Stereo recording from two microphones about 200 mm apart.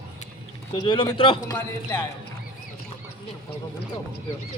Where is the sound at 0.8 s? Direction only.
20° left (ahead or behind).